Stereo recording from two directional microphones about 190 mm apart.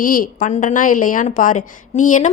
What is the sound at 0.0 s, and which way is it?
A woman's voice, 45° left (ahead or behind).